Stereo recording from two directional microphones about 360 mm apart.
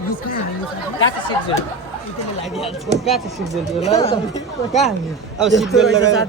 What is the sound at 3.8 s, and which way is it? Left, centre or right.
Speech, centre.